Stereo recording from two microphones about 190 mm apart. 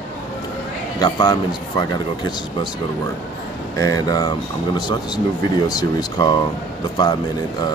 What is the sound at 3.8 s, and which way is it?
Speech, 20° left (ahead or behind).